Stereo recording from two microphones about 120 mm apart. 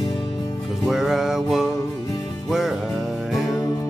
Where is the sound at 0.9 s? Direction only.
5° right (ahead or behind).